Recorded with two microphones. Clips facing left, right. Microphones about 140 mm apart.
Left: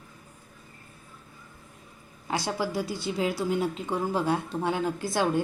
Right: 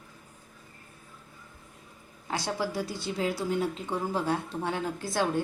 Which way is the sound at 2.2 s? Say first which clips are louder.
Left 2 dB; 10° left (ahead or behind).